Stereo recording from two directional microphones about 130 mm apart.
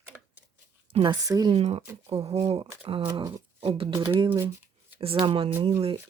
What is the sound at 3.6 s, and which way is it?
Speech, 45° right (ahead or behind).